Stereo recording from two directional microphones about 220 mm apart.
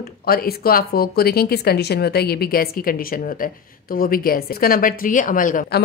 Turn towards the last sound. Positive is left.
turn(degrees=40)  # may be behind; listen again after turning